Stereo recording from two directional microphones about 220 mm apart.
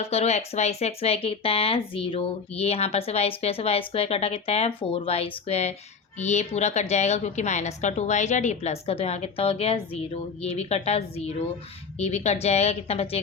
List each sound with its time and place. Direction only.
0.1 s a woman's voice: 30° left (ahead or behind)